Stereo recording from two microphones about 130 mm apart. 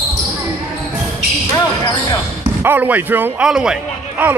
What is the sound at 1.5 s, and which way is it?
Basketball bounce, 30° left (ahead or behind).